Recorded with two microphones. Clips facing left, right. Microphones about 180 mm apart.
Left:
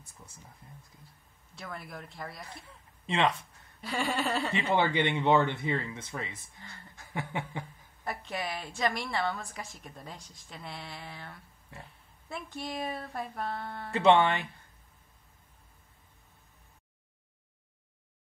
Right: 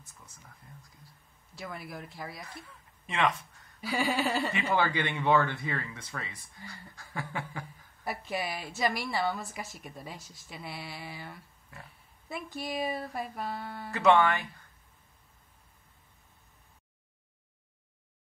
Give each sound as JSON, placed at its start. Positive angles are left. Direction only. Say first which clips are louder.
{"t": 0.0, "sound": "a sound", "louder": "left 2 dB", "side_deg": 30}
{"t": 1.5, "sound": "a woman's voice", "louder": "right 2 dB", "side_deg": -5}
{"t": 2.4, "sound": "speech", "louder": "right 1 dB", "side_deg": 30}
{"t": 3.8, "sound": "a woman's voice", "louder": "right 2 dB", "side_deg": -5}
{"t": 4.5, "sound": "speech", "louder": "left 1 dB", "side_deg": 30}
{"t": 8.0, "sound": "a woman's voice", "louder": "right 2 dB", "side_deg": -5}
{"t": 13.9, "sound": "speech", "louder": "left 1 dB", "side_deg": 25}